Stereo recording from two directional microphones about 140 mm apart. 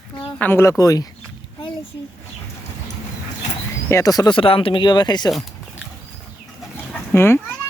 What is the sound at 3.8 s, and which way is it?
Speech, 20° left (ahead or behind).